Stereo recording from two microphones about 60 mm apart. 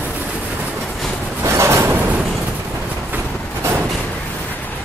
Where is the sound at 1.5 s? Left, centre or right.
Right.